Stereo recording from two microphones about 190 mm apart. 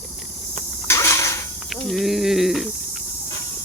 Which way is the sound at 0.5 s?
15° left (ahead or behind).